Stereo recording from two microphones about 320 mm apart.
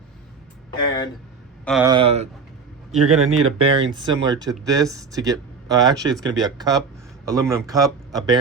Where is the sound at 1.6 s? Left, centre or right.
Centre.